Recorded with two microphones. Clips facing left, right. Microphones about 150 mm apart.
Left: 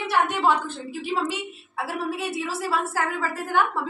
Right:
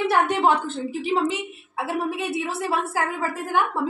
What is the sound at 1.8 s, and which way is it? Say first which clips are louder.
A woman's voice: right 2 dB; 20° right (ahead or behind).